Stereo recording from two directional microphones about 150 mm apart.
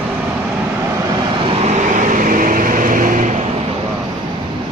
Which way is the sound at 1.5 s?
50° right (ahead or behind).